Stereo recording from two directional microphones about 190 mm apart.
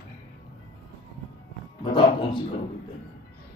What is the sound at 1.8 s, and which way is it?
Speech, 25° left (ahead or behind).